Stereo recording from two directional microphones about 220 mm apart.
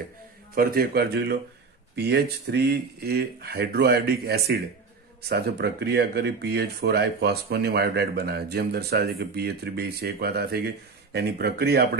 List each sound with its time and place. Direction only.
0.6 s speech: 45° right (ahead or behind)